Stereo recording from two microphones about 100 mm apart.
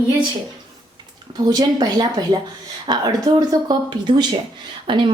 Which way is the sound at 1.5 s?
40° right (ahead or behind).